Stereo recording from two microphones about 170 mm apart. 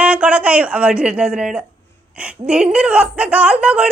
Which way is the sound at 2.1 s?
5° right (ahead or behind).